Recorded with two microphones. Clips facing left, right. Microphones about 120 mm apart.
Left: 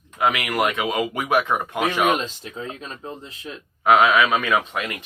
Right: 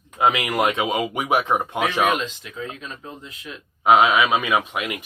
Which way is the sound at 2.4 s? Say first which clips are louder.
Even; 35° left (ahead or behind).